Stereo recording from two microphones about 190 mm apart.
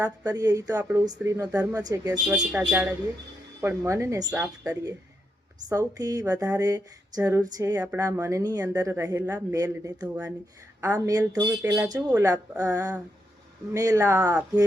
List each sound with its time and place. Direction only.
0.3 s speech: 20° right (ahead or behind)
0.8 s speech: 10° right (ahead or behind)
1.0 s speech: 20° right (ahead or behind)
2.1 s speech: 5° right (ahead or behind)
12.2 s speech: 20° right (ahead or behind)